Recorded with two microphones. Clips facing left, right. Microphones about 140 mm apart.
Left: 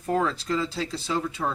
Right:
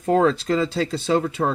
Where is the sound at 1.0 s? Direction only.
65° right (ahead or behind).